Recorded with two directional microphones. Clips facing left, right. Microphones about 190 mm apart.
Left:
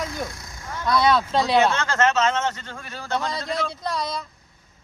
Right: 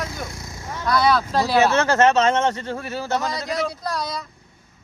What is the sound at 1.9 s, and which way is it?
Speech, 30° right (ahead or behind).